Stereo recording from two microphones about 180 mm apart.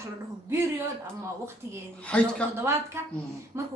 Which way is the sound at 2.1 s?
5° left (ahead or behind).